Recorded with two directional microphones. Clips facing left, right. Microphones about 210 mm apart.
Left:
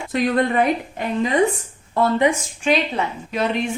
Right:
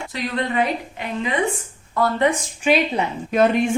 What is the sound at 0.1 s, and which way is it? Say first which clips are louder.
A woman's voice: left 7 dB; 50° left (ahead or behind).